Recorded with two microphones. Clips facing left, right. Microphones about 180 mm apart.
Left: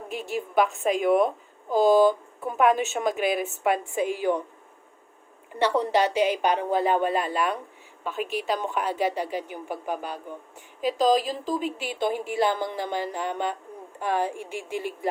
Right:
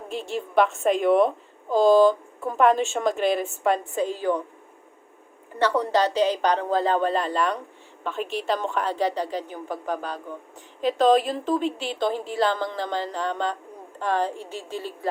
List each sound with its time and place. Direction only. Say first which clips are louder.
0.1 s a woman's voice: right 2 dB; 5° left (ahead or behind)
5.5 s a woman's voice: right 1 dB; 30° left (ahead or behind)
5.9 s a woman's voice: right 1 dB; 10° left (ahead or behind)